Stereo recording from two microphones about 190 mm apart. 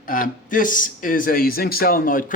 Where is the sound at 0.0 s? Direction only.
45° left (ahead or behind).